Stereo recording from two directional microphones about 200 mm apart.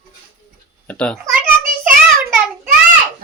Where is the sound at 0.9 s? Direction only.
5° left (ahead or behind).